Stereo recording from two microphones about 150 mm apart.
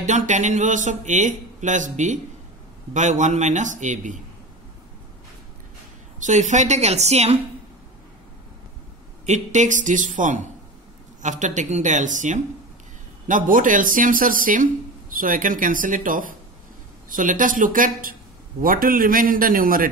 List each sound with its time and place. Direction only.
0.0 s a man's voice: 55° right (ahead or behind)
6.2 s a man's voice: 50° right (ahead or behind)
9.2 s a man's voice: 50° right (ahead or behind); by 19.9 s 70° right (ahead or behind)